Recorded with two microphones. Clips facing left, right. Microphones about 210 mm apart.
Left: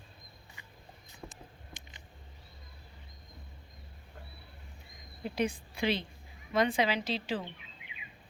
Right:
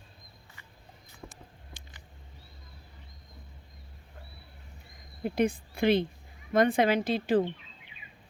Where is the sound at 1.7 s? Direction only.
20° left (ahead or behind).